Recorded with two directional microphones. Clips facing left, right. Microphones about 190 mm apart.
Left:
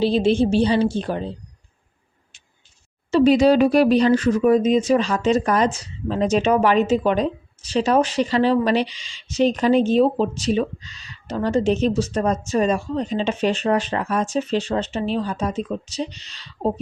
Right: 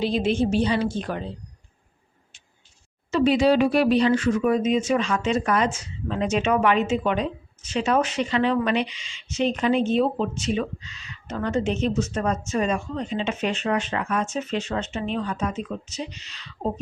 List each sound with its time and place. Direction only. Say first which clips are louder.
0.0 s speech: left 5 dB; 30° left (ahead or behind)
3.1 s speech: left 4 dB; 35° left (ahead or behind)